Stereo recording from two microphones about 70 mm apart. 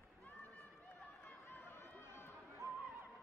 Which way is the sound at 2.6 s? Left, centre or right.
Right.